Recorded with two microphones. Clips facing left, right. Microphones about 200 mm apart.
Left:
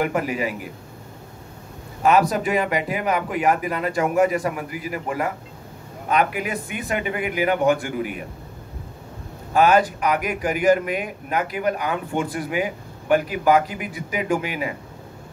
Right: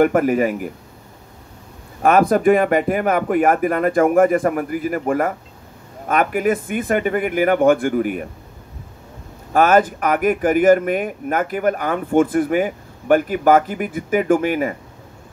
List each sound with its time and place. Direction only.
0.0 s speech: 50° right (ahead or behind)
2.0 s speech: 50° right (ahead or behind)
9.5 s speech: 50° right (ahead or behind)